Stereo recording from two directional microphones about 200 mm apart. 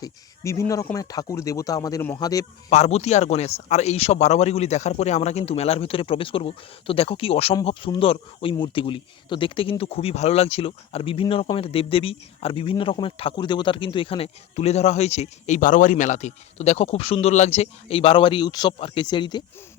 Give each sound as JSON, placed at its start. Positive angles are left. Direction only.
{"t": 0.0, "sound": "a man's voice", "side_deg": 15}
{"t": 2.6, "sound": "a man's voice", "side_deg": 30}